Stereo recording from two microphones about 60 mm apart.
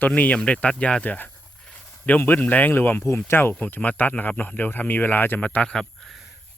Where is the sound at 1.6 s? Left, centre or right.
Centre.